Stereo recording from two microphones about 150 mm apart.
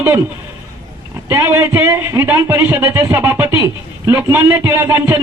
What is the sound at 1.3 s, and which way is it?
Speech, 15° right (ahead or behind).